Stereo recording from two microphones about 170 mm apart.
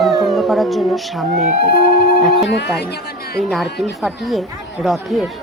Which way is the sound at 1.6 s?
65° left (ahead or behind).